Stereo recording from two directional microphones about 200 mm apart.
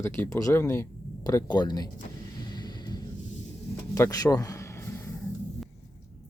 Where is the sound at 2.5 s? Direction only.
20° left (ahead or behind).